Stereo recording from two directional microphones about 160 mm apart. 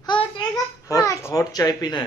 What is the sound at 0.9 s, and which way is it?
A child's voice, 20° left (ahead or behind).